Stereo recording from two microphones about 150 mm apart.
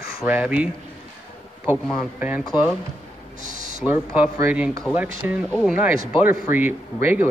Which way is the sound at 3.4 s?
60° right (ahead or behind).